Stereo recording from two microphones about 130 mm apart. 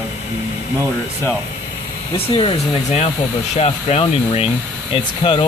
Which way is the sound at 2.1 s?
40° left (ahead or behind).